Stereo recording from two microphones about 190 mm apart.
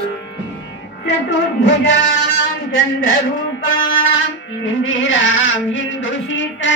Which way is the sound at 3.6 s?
90° left.